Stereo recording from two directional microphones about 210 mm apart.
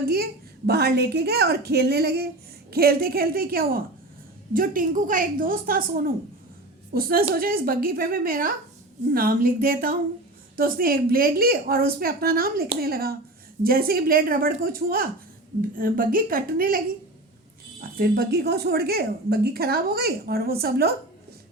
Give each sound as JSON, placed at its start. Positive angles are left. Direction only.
{"t": 0.7, "sound": "a woman's voice", "side_deg": -50}
{"t": 6.9, "sound": "a woman's voice", "side_deg": -45}